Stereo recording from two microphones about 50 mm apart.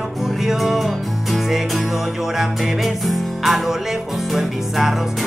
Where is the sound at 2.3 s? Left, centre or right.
Centre.